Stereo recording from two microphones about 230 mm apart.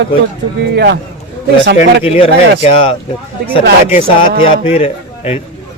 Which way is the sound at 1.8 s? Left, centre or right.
Left.